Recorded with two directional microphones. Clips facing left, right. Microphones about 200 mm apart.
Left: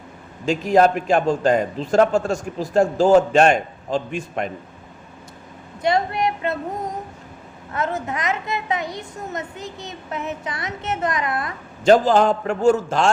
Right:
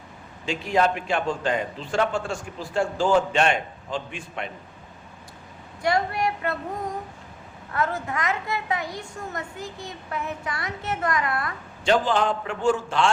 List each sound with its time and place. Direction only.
0.4 s a man's voice: 40° left (ahead or behind)
5.8 s a woman's voice: 20° left (ahead or behind)
7.7 s a woman's voice: 20° left (ahead or behind)
11.9 s a man's voice: 40° left (ahead or behind)